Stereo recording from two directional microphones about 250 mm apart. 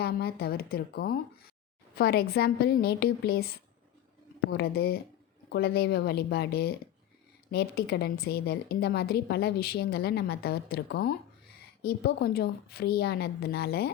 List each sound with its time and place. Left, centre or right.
0.0 s a woman's voice: left